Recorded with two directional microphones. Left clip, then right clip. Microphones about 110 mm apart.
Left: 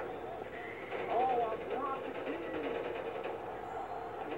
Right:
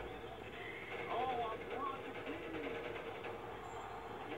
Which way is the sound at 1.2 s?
30° left (ahead or behind).